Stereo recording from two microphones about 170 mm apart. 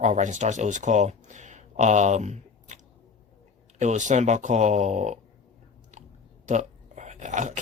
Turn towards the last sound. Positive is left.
turn(degrees=-45)  # may be behind; listen again after turning